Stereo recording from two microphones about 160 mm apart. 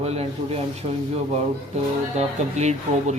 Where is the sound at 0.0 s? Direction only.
40° right (ahead or behind).